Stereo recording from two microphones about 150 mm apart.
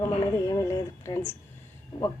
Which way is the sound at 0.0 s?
20° left (ahead or behind).